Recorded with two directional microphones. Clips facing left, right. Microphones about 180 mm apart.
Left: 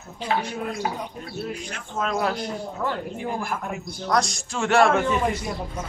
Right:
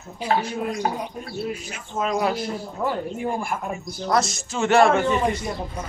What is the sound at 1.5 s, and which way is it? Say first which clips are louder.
Speech: right 1 dB; 10° right (ahead or behind).